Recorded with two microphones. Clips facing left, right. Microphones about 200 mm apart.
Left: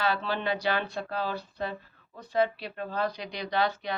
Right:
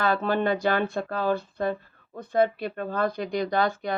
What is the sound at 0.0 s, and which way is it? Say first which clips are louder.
Speech: right 5 dB; 50° right (ahead or behind).